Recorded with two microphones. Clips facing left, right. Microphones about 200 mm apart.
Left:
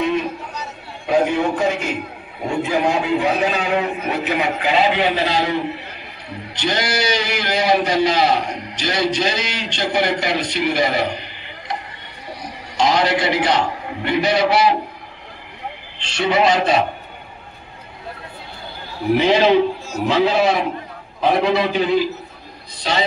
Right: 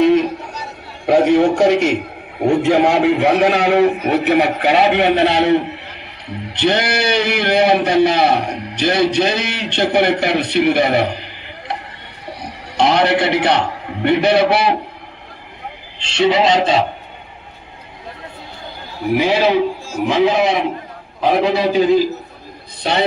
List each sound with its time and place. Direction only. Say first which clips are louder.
1.0 s a man's voice: right 6 dB; 75° right (ahead or behind); by 11.1 s 60° right (ahead or behind)
12.4 s a man's voice: right 3 dB; 60° right (ahead or behind)
16.0 s a man's voice: right 3 dB; 25° right (ahead or behind)
19.1 s a man's voice: even; 10° right (ahead or behind)
21.6 s a man's voice: right 5 dB; 40° right (ahead or behind)
22.8 s a man's voice: right 3 dB; 55° right (ahead or behind)